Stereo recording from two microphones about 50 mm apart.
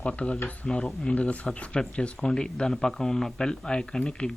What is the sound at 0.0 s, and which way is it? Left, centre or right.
Speech, left.